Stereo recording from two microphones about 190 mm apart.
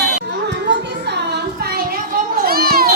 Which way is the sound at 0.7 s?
65° right (ahead or behind).